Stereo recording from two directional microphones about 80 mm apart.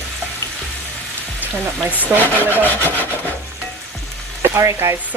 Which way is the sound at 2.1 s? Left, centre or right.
Centre.